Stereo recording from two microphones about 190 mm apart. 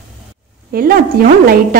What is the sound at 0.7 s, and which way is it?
Speech, 50° right (ahead or behind).